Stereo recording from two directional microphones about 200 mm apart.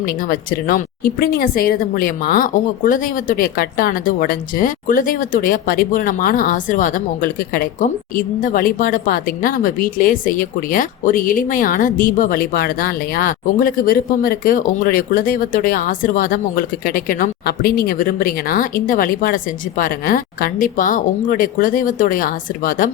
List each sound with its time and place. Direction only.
0.0 s speech: 45° left (ahead or behind)